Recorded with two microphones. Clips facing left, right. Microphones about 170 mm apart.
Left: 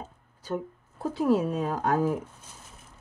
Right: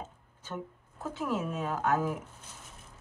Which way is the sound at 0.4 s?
35° left (ahead or behind).